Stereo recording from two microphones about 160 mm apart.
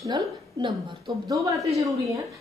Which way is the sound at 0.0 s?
30° right (ahead or behind).